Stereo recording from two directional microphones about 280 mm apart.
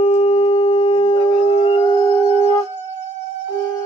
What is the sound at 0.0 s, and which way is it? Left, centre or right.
Shofar, left.